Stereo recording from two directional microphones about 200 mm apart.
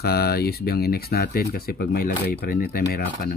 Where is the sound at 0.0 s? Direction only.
50° left (ahead or behind).